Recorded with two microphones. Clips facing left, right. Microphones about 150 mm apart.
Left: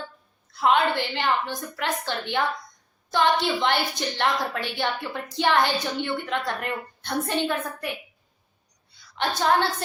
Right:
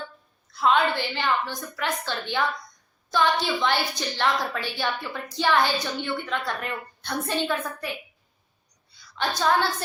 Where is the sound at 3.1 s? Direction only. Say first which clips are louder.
Left 1 dB; 20° left (ahead or behind).